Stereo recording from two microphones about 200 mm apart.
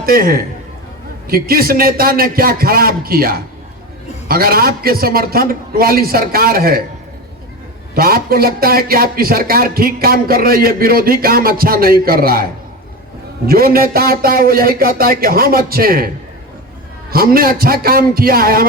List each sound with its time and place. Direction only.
0.0 s a man's voice: 45° right (ahead or behind)
7.9 s a man's voice: 50° right (ahead or behind)
13.5 s a man's voice: 50° right (ahead or behind)
17.1 s a man's voice: 45° right (ahead or behind)